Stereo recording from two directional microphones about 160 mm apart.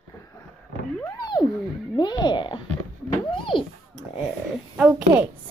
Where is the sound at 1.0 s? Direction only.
25° left (ahead or behind).